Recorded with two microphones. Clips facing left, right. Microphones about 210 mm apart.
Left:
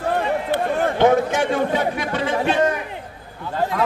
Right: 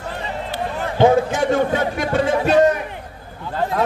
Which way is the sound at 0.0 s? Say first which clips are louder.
Left 6 dB; 55° left (ahead or behind).